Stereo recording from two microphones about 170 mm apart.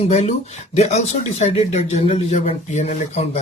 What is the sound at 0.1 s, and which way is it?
Speech, 40° left (ahead or behind).